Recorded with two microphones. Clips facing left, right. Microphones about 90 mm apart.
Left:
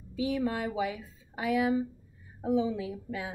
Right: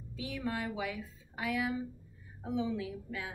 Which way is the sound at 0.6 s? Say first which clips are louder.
Left 5 dB; 20° left (ahead or behind).